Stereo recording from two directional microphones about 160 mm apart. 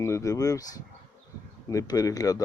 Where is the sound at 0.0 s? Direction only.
20° left (ahead or behind).